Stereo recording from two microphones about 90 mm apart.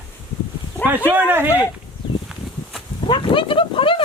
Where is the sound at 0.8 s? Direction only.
20° right (ahead or behind).